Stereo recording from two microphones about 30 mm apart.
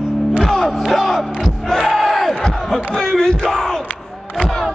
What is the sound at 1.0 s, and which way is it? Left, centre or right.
Crowd, centre.